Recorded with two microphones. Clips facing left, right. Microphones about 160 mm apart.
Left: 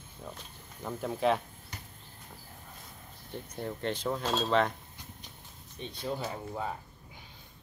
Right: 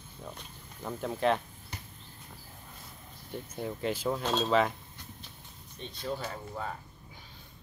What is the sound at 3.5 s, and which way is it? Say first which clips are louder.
Speech: right 1 dB; 5° right (ahead or behind).